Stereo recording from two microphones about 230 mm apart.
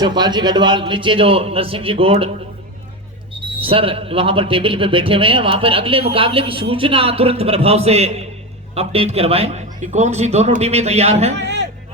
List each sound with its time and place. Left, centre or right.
0.0 s a man's voice: centre
3.6 s a man's voice: right
11.3 s a man's voice: right